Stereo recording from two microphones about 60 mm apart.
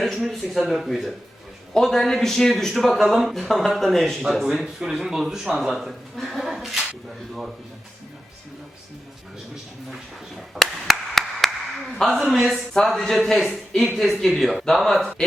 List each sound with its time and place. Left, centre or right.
0.0 s speech: centre
4.4 s speech: centre
9.9 s speech: centre